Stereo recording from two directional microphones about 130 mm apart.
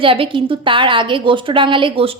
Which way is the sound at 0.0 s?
45° right (ahead or behind).